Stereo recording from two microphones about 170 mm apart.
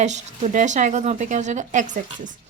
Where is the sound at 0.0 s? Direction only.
45° right (ahead or behind).